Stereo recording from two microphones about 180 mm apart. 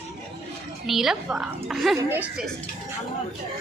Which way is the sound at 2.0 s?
10° right (ahead or behind).